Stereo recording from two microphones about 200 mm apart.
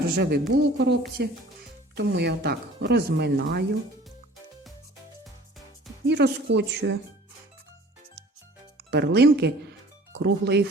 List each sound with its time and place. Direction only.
0.2 s speech: 50° right (ahead or behind)
6.1 s speech: 55° right (ahead or behind)
8.2 s music: 55° right (ahead or behind)
8.9 s speech: 55° right (ahead or behind)